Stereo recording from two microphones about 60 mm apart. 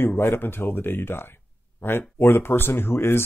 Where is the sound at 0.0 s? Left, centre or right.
Left.